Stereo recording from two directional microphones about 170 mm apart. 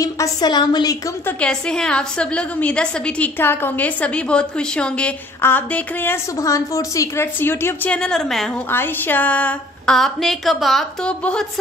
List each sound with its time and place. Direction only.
0.0 s a woman's voice: 20° left (ahead or behind)
1.4 s a woman's voice: 5° left (ahead or behind)
8.6 s a sound: 10° left (ahead or behind)